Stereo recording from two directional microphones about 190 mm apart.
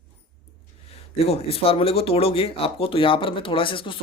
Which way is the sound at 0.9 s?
30° left (ahead or behind).